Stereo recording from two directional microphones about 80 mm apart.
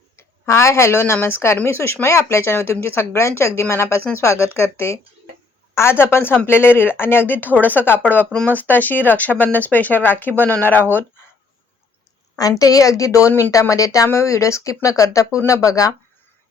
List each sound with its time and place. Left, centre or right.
0.2 s speech: left
12.4 s a woman's voice: left